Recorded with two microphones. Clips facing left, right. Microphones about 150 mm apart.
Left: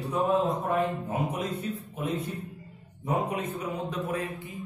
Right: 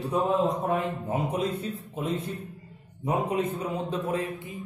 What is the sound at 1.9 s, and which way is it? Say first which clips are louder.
A man's voice: right 3 dB; 30° right (ahead or behind).